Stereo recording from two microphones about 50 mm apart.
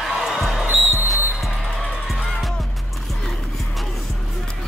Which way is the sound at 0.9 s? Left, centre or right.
Left.